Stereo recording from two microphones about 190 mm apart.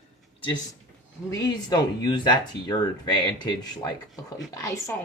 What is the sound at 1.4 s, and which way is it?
A woman's voice, 20° left (ahead or behind).